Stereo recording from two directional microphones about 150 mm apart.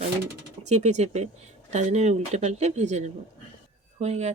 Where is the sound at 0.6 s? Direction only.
50° right (ahead or behind).